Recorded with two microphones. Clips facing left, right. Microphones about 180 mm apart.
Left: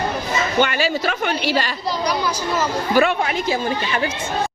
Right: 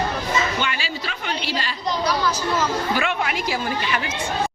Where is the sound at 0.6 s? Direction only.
45° left (ahead or behind).